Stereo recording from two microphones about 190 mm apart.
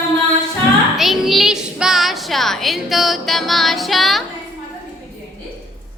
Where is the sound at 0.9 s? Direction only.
Centre (ahead or behind).